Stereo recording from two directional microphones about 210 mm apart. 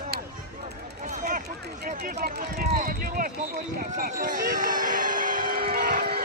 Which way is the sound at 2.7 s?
45° right (ahead or behind).